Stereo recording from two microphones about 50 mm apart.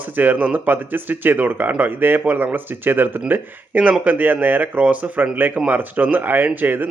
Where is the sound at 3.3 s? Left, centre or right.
Right.